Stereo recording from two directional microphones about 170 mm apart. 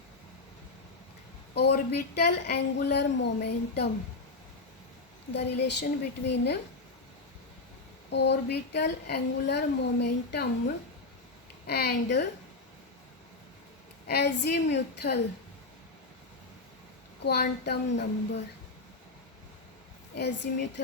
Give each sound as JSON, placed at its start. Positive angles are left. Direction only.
{"t": 1.5, "sound": "speech", "side_deg": 75}
{"t": 5.3, "sound": "a woman's voice", "side_deg": 85}
{"t": 8.1, "sound": "speech", "side_deg": 90}
{"t": 11.6, "sound": "speech", "side_deg": 70}
{"t": 14.1, "sound": "speech", "side_deg": 80}
{"t": 17.2, "sound": "speech", "side_deg": 70}
{"t": 20.1, "sound": "a woman's voice", "side_deg": 90}